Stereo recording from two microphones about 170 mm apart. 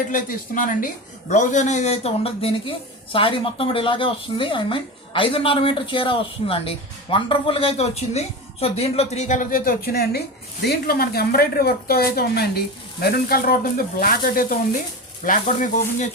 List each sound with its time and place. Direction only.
0.1 s a woman's voice: 50° left (ahead or behind)
15.2 s speech: 50° left (ahead or behind)